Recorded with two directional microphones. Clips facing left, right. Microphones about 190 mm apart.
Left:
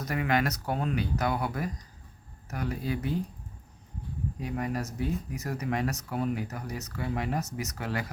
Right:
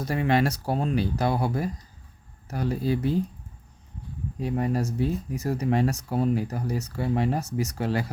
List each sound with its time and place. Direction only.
0.0 s speech: 30° right (ahead or behind)
4.4 s speech: 30° right (ahead or behind)